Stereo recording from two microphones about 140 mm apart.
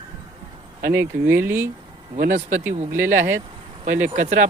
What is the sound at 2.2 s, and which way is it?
Speech, 65° right (ahead or behind).